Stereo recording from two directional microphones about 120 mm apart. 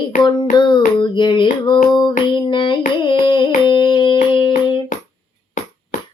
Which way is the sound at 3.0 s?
45° left (ahead or behind).